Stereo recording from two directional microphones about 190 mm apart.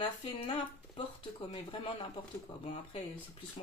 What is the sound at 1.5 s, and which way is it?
Speech, 25° left (ahead or behind).